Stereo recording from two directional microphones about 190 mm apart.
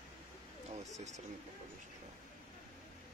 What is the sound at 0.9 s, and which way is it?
Speech, 35° right (ahead or behind).